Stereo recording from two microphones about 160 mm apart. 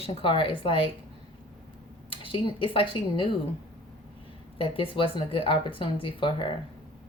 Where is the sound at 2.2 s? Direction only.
35° left (ahead or behind).